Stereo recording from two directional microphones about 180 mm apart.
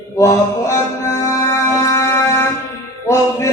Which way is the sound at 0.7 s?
15° left (ahead or behind).